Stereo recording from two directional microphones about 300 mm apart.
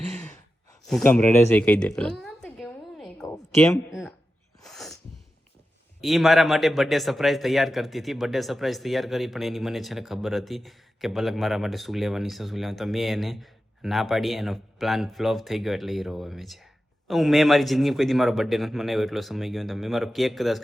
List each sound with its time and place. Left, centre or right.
0.9 s a sound: centre
4.6 s sneeze: centre
6.0 s a man's voice: centre